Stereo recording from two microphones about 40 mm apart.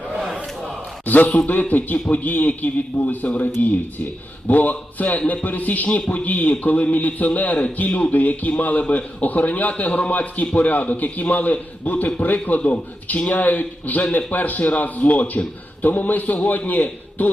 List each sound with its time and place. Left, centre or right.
1.0 s a man's voice: left
9.2 s a man's voice: left